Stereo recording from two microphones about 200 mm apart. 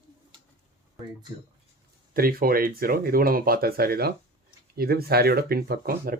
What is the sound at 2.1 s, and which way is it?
Speech, 45° right (ahead or behind).